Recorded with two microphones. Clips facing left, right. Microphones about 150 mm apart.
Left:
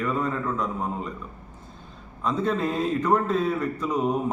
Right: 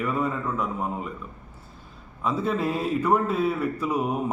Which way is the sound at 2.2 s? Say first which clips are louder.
Even; 5° right (ahead or behind).